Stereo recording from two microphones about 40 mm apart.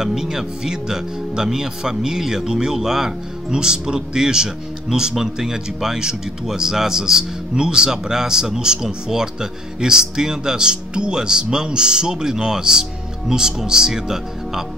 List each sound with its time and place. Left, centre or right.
0.0 s speech: centre